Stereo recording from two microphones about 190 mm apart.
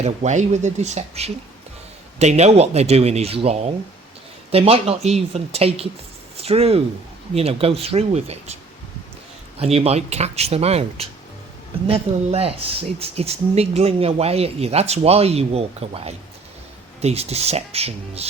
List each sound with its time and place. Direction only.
0.0 s speech: 40° right (ahead or behind)
9.6 s speech: 35° right (ahead or behind)